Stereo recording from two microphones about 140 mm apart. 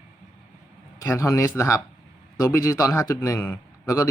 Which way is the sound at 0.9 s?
20° left (ahead or behind).